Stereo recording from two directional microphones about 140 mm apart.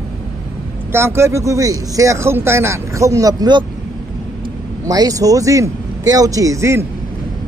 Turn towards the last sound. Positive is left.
turn(degrees=-20)  # may be behind; listen again after turning